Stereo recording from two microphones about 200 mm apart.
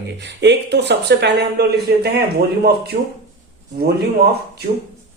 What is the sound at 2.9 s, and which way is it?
Speech, 35° right (ahead or behind).